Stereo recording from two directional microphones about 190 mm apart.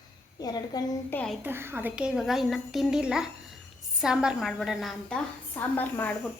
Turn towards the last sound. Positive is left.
turn(degrees=10)  # may be behind; listen again after turning